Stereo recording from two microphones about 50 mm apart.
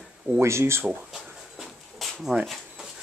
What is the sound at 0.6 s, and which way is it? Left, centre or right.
Speech, right.